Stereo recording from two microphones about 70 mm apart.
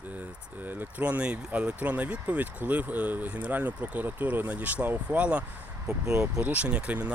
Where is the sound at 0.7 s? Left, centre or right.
Right.